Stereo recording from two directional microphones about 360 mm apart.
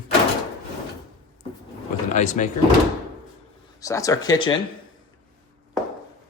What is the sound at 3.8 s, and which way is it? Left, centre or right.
Speech, centre.